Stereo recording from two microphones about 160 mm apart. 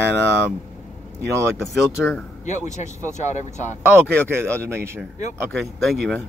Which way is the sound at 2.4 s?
50° left (ahead or behind).